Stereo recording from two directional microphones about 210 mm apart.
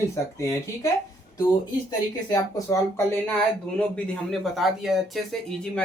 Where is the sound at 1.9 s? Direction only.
15° left (ahead or behind).